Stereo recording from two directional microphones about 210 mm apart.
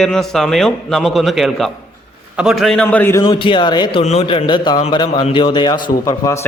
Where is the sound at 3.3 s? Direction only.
25° left (ahead or behind).